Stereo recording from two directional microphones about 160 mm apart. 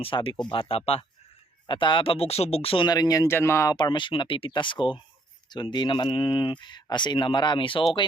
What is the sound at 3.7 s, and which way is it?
Speech, 30° left (ahead or behind).